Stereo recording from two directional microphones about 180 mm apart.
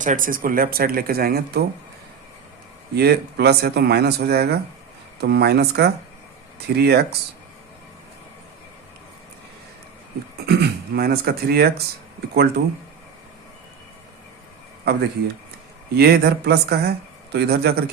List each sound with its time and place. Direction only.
0.0 s speech: 45° right (ahead or behind)
2.9 s speech: 60° right (ahead or behind)
10.4 s speech: 65° right (ahead or behind)
16.0 s speech: 60° right (ahead or behind)